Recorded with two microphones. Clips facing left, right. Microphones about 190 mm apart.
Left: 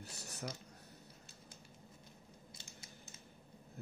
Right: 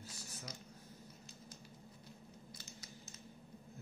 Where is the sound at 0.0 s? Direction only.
65° left (ahead or behind).